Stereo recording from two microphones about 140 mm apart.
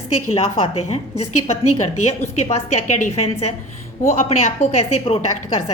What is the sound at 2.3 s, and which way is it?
A woman's voice, 50° left (ahead or behind).